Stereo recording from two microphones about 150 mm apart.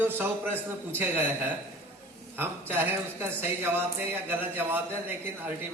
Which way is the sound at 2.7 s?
15° right (ahead or behind).